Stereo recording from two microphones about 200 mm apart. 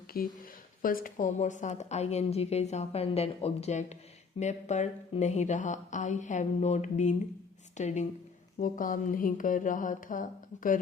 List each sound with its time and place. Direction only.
0.1 s mantra: 50° left (ahead or behind)
0.8 s speech: 45° left (ahead or behind)
8.5 s mantra: 45° left (ahead or behind)